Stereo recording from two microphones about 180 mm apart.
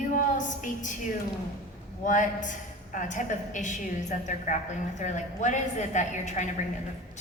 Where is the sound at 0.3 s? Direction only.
45° left (ahead or behind).